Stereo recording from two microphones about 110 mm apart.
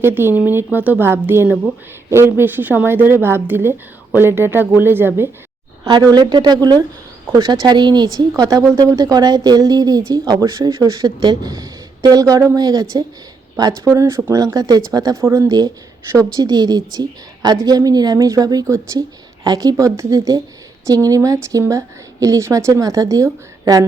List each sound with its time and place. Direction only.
0.0 s a woman's voice: 20° right (ahead or behind)
5.8 s a woman's voice: 35° right (ahead or behind)